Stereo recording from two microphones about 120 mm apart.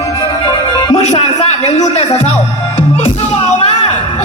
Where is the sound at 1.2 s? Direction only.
60° left (ahead or behind).